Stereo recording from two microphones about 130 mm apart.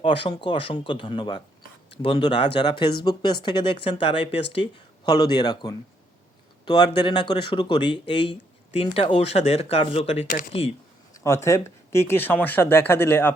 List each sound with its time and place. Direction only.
0.0 s speech: 40° left (ahead or behind)
11.1 s speech: 25° left (ahead or behind)